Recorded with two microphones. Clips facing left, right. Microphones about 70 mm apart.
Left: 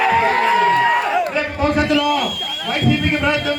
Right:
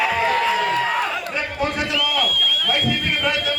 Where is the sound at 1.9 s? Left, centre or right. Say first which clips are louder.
Left 6 dB; left.